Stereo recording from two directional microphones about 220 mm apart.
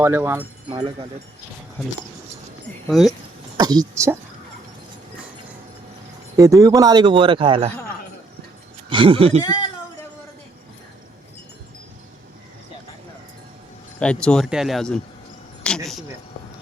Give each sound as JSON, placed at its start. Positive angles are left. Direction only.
{"t": 0.0, "sound": "speech", "side_deg": -10}
{"t": 0.7, "sound": "speech", "side_deg": -25}
{"t": 2.9, "sound": "speech", "side_deg": 0}
{"t": 3.6, "sound": "speech", "side_deg": -20}
{"t": 6.3, "sound": "speech", "side_deg": -15}
{"t": 8.9, "sound": "speech", "side_deg": -25}
{"t": 9.4, "sound": "speech", "side_deg": 20}
{"t": 14.0, "sound": "speech", "side_deg": 5}
{"t": 15.6, "sound": "a sound", "side_deg": 0}